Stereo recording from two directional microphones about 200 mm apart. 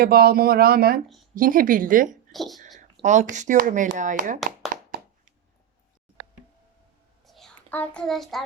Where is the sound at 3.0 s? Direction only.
35° right (ahead or behind).